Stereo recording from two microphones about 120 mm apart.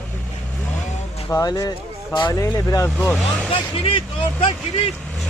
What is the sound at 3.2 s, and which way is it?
Speech, 5° left (ahead or behind).